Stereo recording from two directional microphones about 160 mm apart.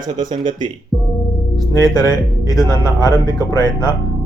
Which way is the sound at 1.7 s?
25° left (ahead or behind).